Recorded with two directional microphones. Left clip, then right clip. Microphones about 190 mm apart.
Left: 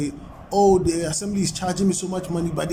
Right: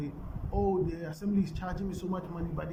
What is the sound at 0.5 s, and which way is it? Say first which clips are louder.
Speech: left 14 dB; 25° left (ahead or behind).